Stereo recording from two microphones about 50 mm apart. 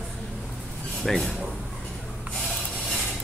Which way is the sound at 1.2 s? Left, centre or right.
Centre.